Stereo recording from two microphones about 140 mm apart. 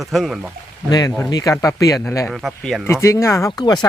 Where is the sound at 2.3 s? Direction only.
Centre (ahead or behind).